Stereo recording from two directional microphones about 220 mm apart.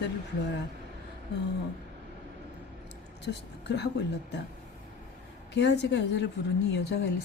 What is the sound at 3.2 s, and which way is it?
Speech, 50° left (ahead or behind).